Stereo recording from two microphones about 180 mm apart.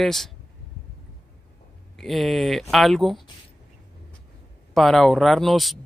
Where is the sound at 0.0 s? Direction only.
Centre (ahead or behind).